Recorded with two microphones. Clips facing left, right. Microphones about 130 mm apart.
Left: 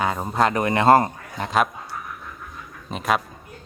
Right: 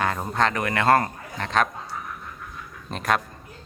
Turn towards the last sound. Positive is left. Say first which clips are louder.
# left 2 dB
turn(degrees=5)  # may be behind; listen again after turning